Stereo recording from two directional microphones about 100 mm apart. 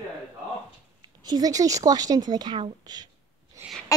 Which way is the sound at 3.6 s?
30° right (ahead or behind).